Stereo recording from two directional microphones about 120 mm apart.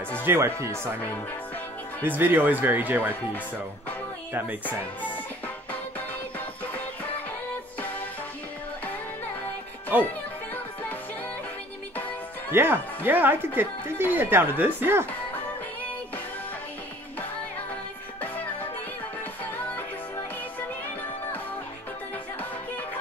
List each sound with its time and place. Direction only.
0.2 s speech: 20° right (ahead or behind)
2.0 s speech: 15° right (ahead or behind)
10.5 s music: 15° left (ahead or behind)
12.4 s speech: 20° right (ahead or behind)